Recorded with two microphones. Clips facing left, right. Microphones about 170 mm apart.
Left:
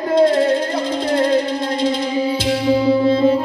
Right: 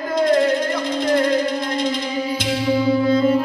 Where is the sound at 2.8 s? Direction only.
30° left (ahead or behind).